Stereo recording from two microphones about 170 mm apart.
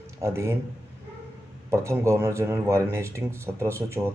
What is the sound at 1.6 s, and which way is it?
Speech, 15° right (ahead or behind).